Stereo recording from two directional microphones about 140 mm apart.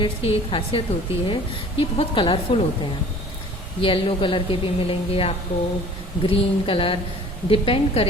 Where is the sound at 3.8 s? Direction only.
40° left (ahead or behind).